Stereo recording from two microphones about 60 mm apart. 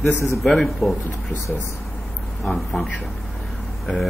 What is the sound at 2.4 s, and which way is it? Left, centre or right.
Speech, centre.